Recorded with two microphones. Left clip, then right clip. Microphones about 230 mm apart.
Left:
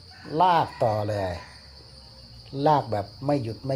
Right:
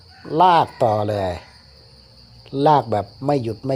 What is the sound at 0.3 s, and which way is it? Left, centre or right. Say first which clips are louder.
Speech: right 6 dB; right.